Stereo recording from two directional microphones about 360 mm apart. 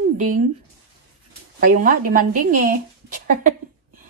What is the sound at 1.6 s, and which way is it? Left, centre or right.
Speech, right.